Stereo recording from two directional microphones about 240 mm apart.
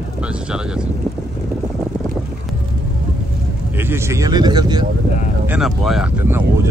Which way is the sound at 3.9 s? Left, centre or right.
Centre.